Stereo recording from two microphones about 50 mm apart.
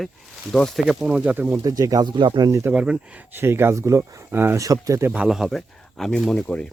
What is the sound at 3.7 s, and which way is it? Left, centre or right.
Speech, right.